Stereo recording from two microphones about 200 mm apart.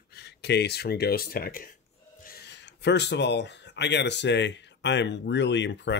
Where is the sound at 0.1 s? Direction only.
55° left (ahead or behind).